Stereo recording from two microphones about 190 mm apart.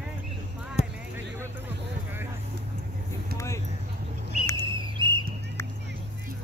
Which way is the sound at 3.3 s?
15° left (ahead or behind).